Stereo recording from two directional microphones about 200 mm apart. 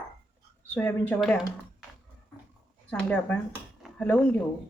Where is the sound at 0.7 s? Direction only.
10° left (ahead or behind).